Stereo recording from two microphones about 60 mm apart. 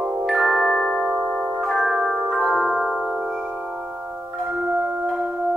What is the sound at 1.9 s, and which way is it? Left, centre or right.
Marimba, centre.